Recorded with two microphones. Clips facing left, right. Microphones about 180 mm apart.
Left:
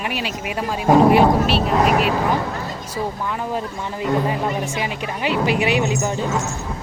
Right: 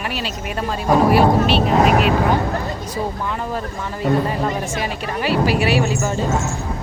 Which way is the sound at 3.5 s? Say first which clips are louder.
Even; 15° left (ahead or behind).